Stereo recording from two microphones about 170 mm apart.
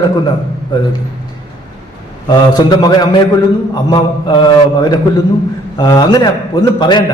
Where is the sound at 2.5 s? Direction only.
25° left (ahead or behind).